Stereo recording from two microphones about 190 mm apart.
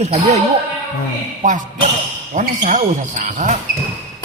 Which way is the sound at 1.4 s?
45° right (ahead or behind).